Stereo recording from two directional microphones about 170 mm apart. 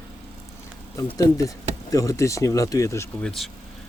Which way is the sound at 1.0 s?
20° left (ahead or behind).